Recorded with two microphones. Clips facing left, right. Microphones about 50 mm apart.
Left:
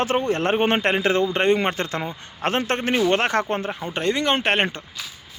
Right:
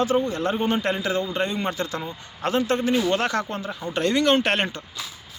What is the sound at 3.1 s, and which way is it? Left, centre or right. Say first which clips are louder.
Speech: left 3 dB; left.